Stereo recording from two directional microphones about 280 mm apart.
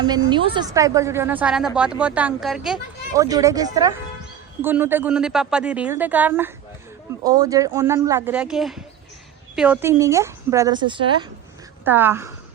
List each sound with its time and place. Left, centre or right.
0.0 s a woman's voice: centre
3.2 s a woman's voice: centre